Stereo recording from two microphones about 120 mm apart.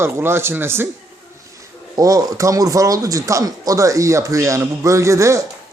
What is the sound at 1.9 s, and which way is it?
Speech, 30° right (ahead or behind).